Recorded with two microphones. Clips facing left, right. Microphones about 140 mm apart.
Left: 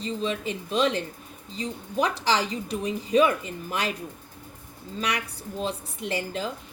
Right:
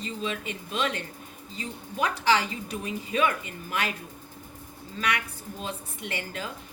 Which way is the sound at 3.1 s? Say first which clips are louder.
Left 6 dB; 35° left (ahead or behind).